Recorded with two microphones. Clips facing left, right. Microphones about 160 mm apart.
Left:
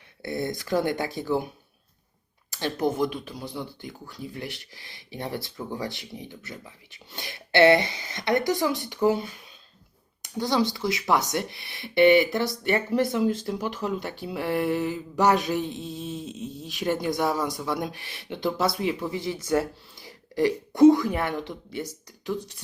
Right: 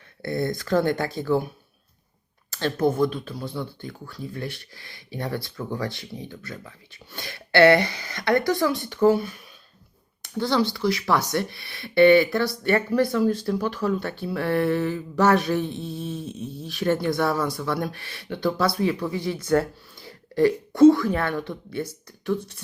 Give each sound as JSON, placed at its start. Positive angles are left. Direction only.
{"t": 0.2, "sound": "speech", "side_deg": 15}
{"t": 2.5, "sound": "speech", "side_deg": 15}
{"t": 10.2, "sound": "speech", "side_deg": 15}